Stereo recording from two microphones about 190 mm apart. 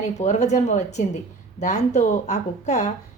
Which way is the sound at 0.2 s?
35° left (ahead or behind).